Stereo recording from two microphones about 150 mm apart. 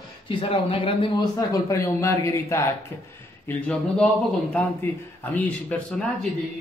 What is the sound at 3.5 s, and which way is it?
Speech, 10° left (ahead or behind).